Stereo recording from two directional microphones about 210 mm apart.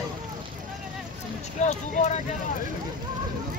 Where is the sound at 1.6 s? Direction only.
35° left (ahead or behind).